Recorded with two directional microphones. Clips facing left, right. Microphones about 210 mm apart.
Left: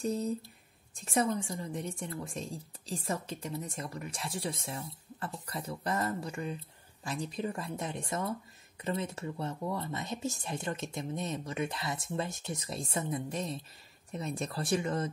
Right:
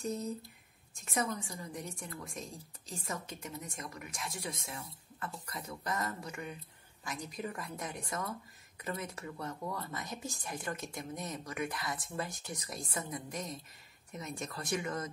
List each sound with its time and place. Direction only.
0.0 s speech: 30° left (ahead or behind)